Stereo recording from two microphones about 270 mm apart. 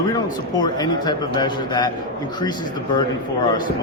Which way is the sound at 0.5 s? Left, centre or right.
Centre.